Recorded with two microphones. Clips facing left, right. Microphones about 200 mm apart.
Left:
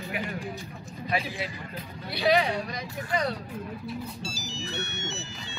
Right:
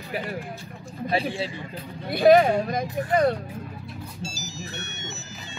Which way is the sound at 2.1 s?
50° right (ahead or behind).